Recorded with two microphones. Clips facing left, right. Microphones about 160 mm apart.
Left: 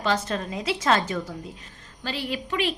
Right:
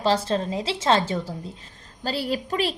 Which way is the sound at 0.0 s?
30° right (ahead or behind).